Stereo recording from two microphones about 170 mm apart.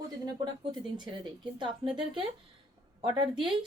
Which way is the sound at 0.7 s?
25° right (ahead or behind).